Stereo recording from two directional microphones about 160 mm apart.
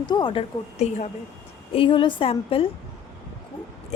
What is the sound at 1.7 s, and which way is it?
Speech, 35° left (ahead or behind).